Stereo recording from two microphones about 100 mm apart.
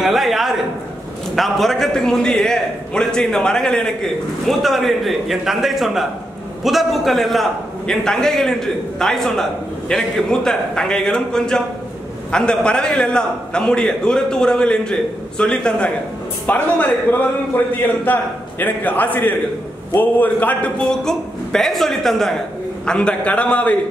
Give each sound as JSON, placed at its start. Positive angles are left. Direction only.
{"t": 0.0, "sound": "a man's voice", "side_deg": 0}